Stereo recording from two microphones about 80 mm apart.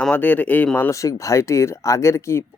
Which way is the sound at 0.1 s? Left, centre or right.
Left.